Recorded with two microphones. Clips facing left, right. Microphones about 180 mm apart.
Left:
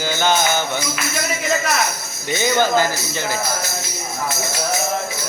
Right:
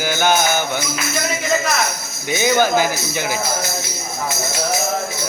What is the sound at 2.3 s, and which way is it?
Music, 10° right (ahead or behind).